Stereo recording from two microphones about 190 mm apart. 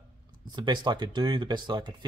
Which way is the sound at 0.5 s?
20° right (ahead or behind).